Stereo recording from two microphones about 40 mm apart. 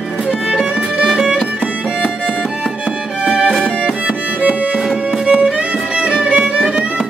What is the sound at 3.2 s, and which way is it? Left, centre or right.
Music, right.